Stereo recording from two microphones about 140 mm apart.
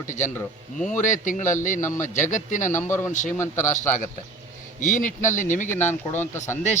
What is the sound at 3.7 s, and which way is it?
A man's voice, 70° left (ahead or behind).